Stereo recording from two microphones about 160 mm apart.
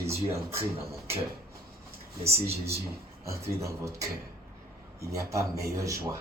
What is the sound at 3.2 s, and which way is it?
Speech, 20° right (ahead or behind).